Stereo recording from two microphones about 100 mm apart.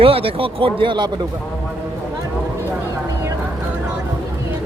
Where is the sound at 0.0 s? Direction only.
70° right (ahead or behind); by 1.1 s 50° right (ahead or behind).